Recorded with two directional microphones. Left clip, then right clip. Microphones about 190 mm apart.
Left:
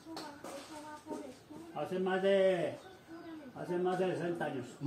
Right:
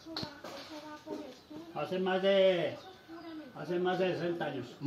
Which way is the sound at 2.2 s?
30° right (ahead or behind).